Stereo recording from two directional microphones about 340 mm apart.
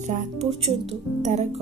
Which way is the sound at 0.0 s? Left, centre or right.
Right.